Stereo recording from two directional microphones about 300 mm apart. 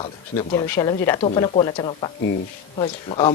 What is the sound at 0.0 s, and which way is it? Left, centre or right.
A man's voice, centre.